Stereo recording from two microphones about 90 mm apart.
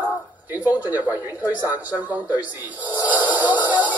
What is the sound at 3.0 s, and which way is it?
Music, 20° right (ahead or behind).